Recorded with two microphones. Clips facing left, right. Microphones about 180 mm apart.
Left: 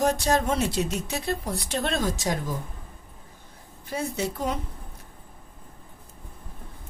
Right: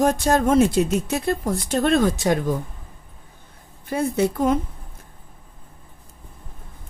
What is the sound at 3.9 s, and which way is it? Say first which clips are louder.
Speech: right 8 dB; 55° right (ahead or behind).